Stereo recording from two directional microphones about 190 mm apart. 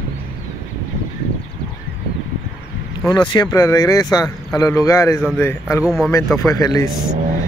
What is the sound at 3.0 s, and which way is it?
Speech, 20° left (ahead or behind).